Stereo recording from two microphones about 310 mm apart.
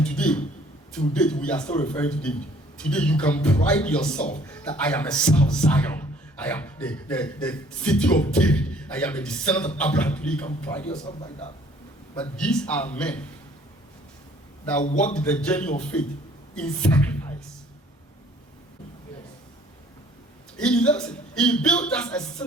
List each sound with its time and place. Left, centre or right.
0.0 s a sound: centre
0.9 s speech: centre
11.0 s a man's voice: centre
12.4 s speech: centre
14.9 s speech: centre
20.6 s speech: centre